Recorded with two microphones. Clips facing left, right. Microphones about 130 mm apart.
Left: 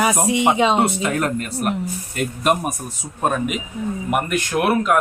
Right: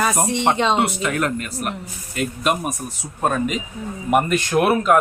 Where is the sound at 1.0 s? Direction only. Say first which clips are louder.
Left 1 dB; 40° left (ahead or behind).